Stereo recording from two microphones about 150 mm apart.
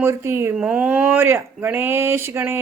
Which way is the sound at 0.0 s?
15° right (ahead or behind).